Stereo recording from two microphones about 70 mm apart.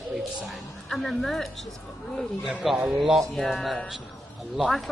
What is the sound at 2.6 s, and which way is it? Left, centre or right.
Speech, centre.